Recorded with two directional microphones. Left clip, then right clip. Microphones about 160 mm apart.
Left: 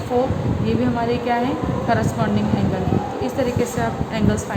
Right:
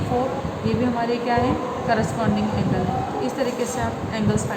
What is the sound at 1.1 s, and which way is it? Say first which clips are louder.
Speech: left 1 dB; 40° left (ahead or behind).